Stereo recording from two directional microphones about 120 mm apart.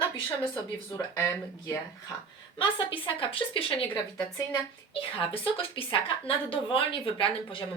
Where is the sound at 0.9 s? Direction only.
25° left (ahead or behind).